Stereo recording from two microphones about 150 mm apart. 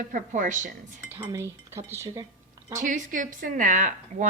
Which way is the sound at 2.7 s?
55° right (ahead or behind).